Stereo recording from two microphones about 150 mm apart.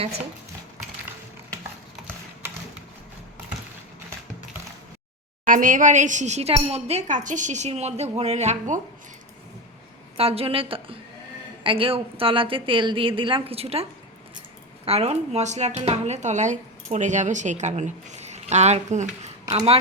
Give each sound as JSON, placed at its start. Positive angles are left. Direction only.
{"t": 5.5, "sound": "speech", "side_deg": -65}
{"t": 10.2, "sound": "a woman's voice", "side_deg": -40}
{"t": 14.8, "sound": "speech", "side_deg": -45}